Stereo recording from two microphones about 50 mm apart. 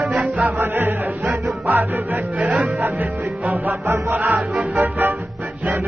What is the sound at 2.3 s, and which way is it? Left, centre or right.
Music, right.